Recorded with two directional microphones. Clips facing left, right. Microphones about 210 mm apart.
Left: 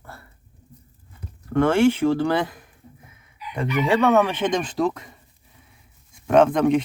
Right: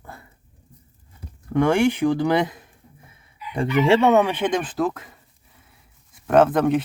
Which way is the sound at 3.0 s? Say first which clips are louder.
Right 1 dB; 30° right (ahead or behind).